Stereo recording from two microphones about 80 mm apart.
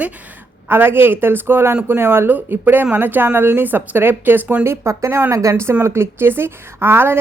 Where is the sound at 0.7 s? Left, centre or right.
Right.